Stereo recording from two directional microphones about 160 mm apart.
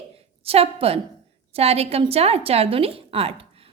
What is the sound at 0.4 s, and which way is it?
A woman's voice, 40° right (ahead or behind).